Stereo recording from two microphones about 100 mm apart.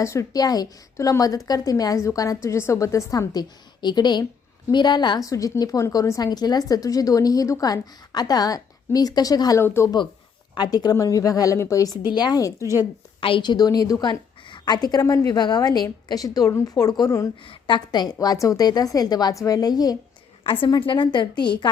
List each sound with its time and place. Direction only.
0.0 s a woman's voice: 30° left (ahead or behind); by 5.3 s 45° left (ahead or behind)
5.3 s a woman's voice: 35° left (ahead or behind)
9.6 s speech: 25° left (ahead or behind)
10.5 s a woman's voice: 45° left (ahead or behind)
13.1 s a woman's voice: 60° left (ahead or behind); by 20.0 s 40° left (ahead or behind)
20.4 s a woman's voice: 55° left (ahead or behind)